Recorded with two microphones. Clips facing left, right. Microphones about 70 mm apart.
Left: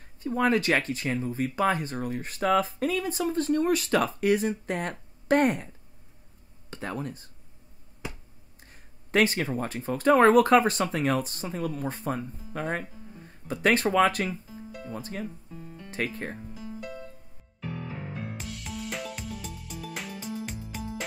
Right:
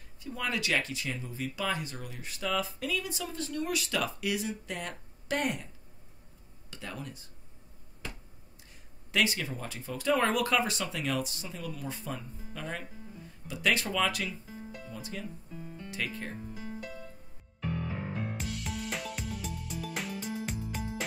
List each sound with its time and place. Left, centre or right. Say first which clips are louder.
0.2 s speech: left 10 dB; left
6.7 s speech: left 8 dB; left
8.0 s finger snapping: left 4 dB; centre
9.1 s speech: left 6 dB; left
18.2 s music: right 1 dB; centre